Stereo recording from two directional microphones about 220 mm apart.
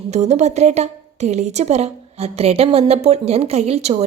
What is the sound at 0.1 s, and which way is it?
A woman's voice, 30° right (ahead or behind).